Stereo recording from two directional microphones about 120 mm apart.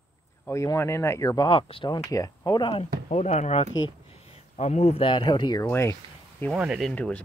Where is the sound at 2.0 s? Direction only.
30° left (ahead or behind).